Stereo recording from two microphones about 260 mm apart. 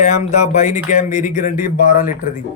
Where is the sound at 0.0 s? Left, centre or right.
Left.